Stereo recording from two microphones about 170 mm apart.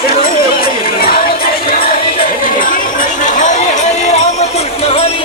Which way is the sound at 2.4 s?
50° left (ahead or behind).